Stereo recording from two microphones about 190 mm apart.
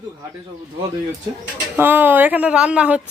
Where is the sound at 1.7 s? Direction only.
10° right (ahead or behind).